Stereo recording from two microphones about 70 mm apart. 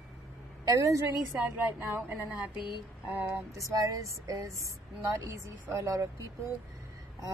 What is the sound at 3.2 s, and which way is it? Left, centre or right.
Speech, right.